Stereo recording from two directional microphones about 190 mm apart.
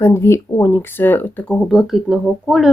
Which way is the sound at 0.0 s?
15° left (ahead or behind).